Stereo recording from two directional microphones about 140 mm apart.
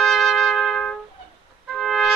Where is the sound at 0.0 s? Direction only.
Centre (ahead or behind).